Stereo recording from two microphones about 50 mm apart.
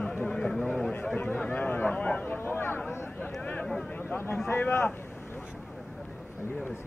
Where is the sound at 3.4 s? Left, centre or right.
Left.